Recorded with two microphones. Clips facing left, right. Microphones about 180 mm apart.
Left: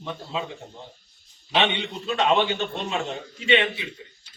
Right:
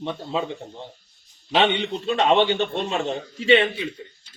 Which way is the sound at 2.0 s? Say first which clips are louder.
Right 3 dB; 35° right (ahead or behind).